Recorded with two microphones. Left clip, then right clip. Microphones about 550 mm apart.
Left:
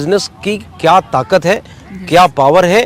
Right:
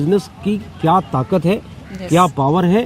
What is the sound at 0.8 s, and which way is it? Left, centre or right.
Speech, left.